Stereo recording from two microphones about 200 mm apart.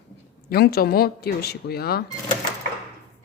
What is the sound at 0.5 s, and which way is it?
Speech, 50° left (ahead or behind).